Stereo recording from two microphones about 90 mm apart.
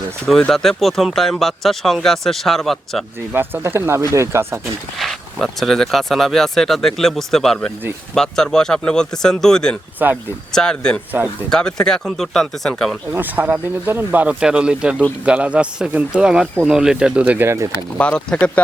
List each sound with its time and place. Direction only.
0.5 s speech: centre (ahead or behind)
3.3 s speech: 25° right (ahead or behind)
4.9 s speech: 5° left (ahead or behind)
11.1 s speech: 20° right (ahead or behind)
11.4 s speech: 5° left (ahead or behind)
13.1 s speech: 20° right (ahead or behind)
17.9 s speech: 10° left (ahead or behind)